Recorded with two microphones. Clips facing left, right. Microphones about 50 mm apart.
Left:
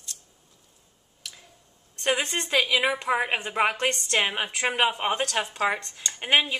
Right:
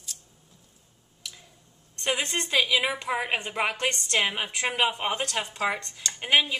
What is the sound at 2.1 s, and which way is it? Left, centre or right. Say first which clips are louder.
Speech: right 2 dB; centre.